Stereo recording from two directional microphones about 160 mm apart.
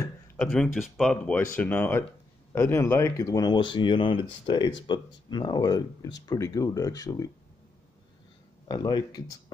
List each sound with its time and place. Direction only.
0.4 s speech: 5° left (ahead or behind); by 7.2 s 20° left (ahead or behind)
8.6 s speech: 25° left (ahead or behind)